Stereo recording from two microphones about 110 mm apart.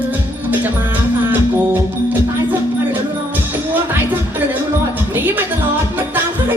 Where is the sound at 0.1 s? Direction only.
15° right (ahead or behind).